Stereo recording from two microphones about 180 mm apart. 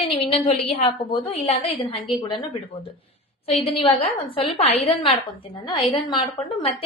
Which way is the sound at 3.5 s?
30° left (ahead or behind).